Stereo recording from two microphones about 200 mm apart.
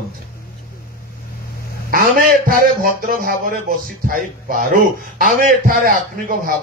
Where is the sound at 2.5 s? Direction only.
45° right (ahead or behind).